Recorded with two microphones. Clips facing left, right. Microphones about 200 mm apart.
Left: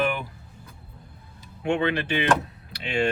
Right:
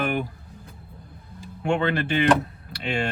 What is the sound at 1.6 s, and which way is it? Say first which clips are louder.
Speech: right 1 dB; 45° right (ahead or behind).